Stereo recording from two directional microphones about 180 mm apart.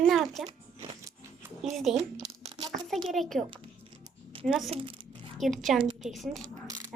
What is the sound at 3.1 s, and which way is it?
Speech, centre (ahead or behind).